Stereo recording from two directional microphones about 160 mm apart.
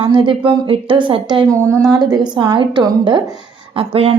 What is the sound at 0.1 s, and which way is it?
A woman's voice, 30° right (ahead or behind).